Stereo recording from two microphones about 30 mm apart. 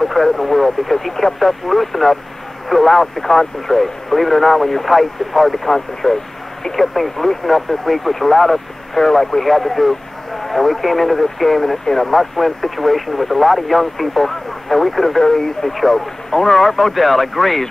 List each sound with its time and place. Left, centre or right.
0.0 s speech: centre
15.7 s speech: centre
16.3 s speech: centre
16.7 s speech: centre